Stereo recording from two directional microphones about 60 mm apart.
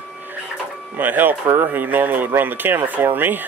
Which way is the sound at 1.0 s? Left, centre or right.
Right.